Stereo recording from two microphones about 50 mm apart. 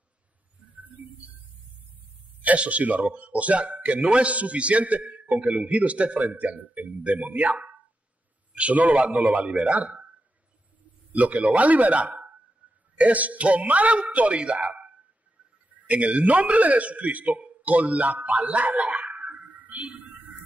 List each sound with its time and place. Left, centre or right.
2.4 s speech: right
11.1 s speech: right
15.9 s a man's voice: right